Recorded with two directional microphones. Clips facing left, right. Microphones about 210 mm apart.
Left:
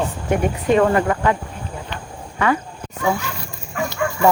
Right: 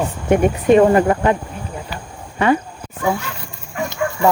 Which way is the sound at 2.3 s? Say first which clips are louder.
Right 4 dB; 25° right (ahead or behind).